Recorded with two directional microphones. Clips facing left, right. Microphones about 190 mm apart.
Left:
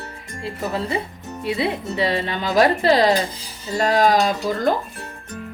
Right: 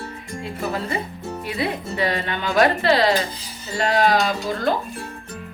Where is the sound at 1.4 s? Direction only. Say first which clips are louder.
Left 4 dB; 25° left (ahead or behind); by 4.7 s 40° left (ahead or behind).